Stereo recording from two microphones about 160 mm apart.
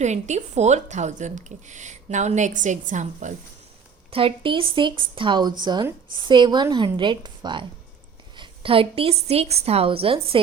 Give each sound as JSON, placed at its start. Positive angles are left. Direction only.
{"t": 0.0, "sound": "a woman's voice", "side_deg": -45}
{"t": 4.1, "sound": "a woman's voice", "side_deg": -35}